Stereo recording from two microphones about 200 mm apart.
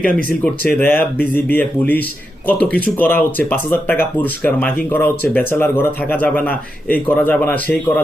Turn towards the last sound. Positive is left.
turn(degrees=10)  # may be behind; listen again after turning